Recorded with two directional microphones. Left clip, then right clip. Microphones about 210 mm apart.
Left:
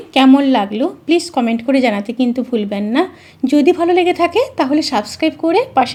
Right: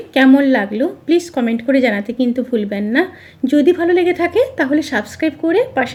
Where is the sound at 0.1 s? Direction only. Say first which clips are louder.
Left 1 dB; 15° left (ahead or behind).